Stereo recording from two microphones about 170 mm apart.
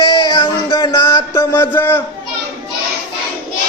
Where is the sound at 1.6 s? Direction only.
10° left (ahead or behind).